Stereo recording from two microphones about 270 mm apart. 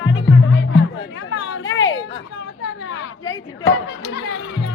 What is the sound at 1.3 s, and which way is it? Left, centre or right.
Speech, left.